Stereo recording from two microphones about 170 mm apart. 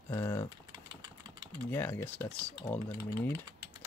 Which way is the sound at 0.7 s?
25° right (ahead or behind).